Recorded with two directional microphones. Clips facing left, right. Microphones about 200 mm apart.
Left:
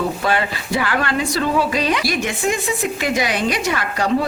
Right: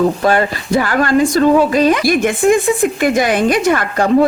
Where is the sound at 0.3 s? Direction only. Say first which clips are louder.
Right 6 dB; 45° right (ahead or behind).